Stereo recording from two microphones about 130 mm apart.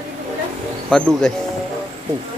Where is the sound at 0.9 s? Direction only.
5° left (ahead or behind).